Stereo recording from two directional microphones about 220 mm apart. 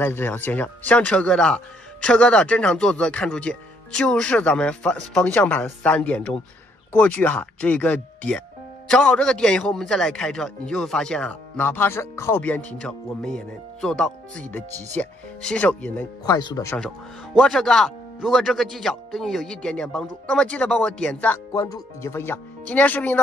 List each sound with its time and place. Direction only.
0.0 s speech: 10° left (ahead or behind)
17.4 s speech: centre (ahead or behind)